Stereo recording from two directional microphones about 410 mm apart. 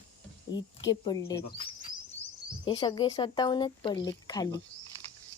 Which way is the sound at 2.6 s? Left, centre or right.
Centre.